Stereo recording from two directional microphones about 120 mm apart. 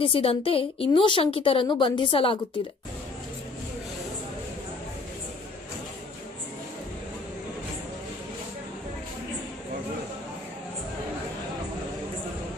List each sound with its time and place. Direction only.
0.0 s a woman's voice: 50° left (ahead or behind)